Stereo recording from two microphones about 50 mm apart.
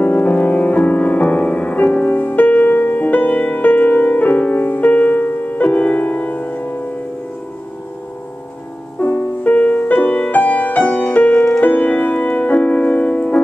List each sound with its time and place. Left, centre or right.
0.0 s music: left
9.0 s music: left
11.6 s music: left